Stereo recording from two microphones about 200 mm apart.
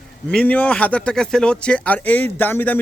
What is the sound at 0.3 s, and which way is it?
A man's voice, 5° left (ahead or behind).